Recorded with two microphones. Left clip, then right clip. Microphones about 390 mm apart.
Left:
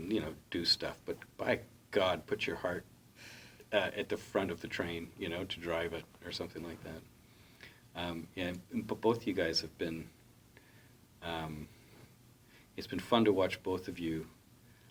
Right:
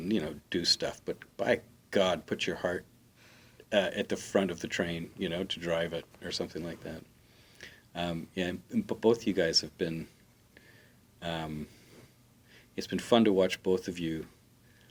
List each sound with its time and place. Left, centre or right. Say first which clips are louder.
0.1 s speech: right 4 dB; right
3.2 s a sound: left 6 dB; left
3.7 s speech: right 4 dB; right
11.2 s speech: right 4 dB; right
12.5 s speech: right 5 dB; right